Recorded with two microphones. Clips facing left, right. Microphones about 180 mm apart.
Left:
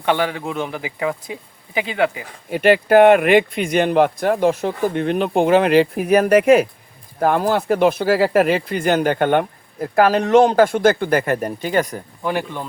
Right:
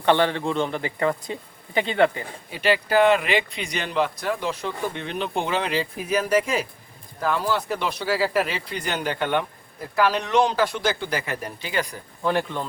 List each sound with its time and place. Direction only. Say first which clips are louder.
0.0 s a man's voice: even; 10° left (ahead or behind)
2.5 s speech: left 8 dB; 55° left (ahead or behind)
12.2 s a man's voice: even; 10° left (ahead or behind)